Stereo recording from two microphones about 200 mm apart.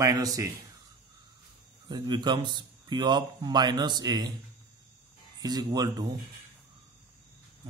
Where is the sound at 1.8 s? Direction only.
20° right (ahead or behind).